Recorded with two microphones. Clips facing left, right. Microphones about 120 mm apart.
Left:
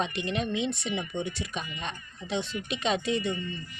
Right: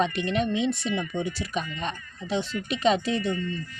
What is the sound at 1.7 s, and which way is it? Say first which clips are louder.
Speech: right 5 dB; 40° right (ahead or behind).